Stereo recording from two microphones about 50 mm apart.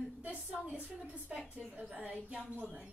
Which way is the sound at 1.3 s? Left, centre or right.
Right.